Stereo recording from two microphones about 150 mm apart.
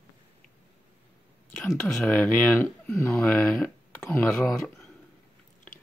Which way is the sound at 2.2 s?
20° left (ahead or behind).